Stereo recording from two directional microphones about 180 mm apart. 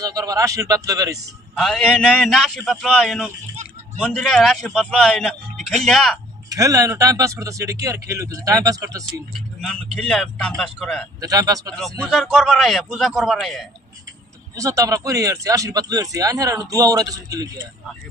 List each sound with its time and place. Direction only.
0.0 s speech: 20° right (ahead or behind)
1.5 s speech: centre (ahead or behind)
6.5 s speech: 20° right (ahead or behind)
9.6 s speech: centre (ahead or behind)
11.2 s speech: 20° right (ahead or behind)
11.7 s speech: 5° left (ahead or behind)
14.5 s speech: 15° right (ahead or behind)